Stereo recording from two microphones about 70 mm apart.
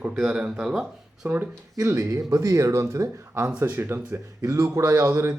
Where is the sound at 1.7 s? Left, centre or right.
Right.